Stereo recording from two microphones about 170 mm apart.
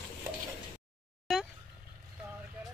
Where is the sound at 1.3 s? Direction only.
Centre (ahead or behind).